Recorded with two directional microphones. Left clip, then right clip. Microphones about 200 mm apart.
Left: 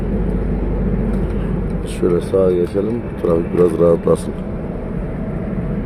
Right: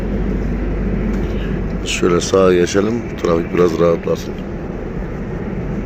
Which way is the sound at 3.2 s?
15° left (ahead or behind).